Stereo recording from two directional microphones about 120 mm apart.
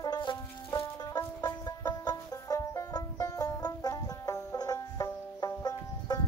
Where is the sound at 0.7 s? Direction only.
30° left (ahead or behind).